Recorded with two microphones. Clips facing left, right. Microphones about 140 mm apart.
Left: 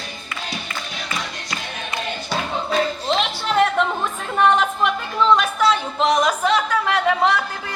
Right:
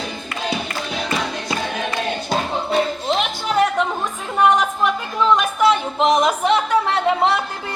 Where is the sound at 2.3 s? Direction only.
15° right (ahead or behind).